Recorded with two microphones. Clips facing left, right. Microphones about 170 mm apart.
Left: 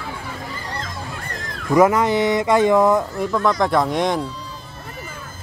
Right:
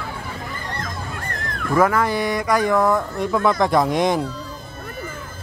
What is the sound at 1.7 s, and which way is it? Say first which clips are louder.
Speech: left 3 dB; 20° left (ahead or behind).